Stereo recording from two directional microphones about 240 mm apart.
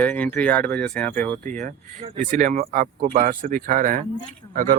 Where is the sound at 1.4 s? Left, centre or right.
Right.